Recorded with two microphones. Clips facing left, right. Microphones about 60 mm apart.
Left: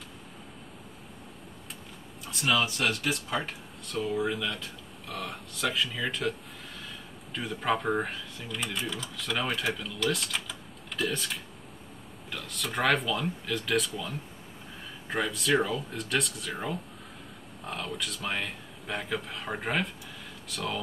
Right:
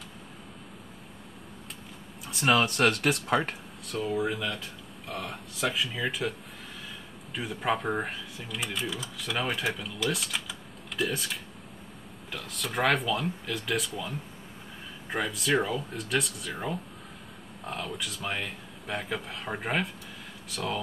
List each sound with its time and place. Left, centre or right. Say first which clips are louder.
2.4 s speech: right 4 dB; right
3.8 s speech: even; centre
7.3 s speech: even; centre